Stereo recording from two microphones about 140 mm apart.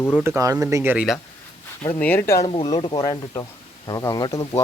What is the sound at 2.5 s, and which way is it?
Speech, 40° left (ahead or behind).